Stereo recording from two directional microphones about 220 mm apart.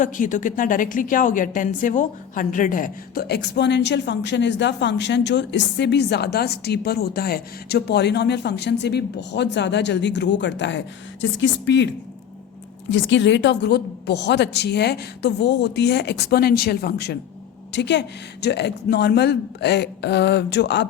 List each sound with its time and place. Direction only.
0.0 s a woman's voice: 35° left (ahead or behind); by 11.9 s 55° left (ahead or behind)
12.9 s a woman's voice: 55° left (ahead or behind)